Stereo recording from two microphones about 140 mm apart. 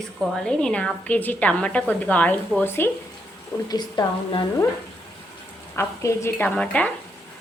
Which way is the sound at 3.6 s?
30° left (ahead or behind).